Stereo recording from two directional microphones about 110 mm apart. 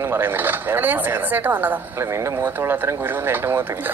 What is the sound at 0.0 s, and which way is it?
A woman's voice, 20° right (ahead or behind).